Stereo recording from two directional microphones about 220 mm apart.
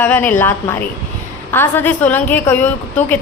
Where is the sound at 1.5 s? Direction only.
10° left (ahead or behind).